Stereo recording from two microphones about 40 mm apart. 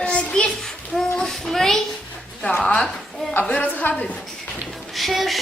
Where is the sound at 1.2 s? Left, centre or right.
Centre.